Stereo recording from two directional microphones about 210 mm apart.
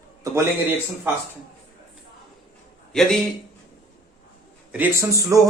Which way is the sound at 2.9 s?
Centre (ahead or behind).